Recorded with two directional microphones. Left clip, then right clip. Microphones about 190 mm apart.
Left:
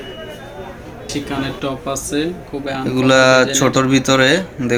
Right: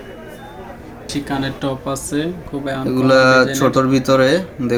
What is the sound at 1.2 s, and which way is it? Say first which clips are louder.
Speech: right 1 dB; 65° right (ahead or behind).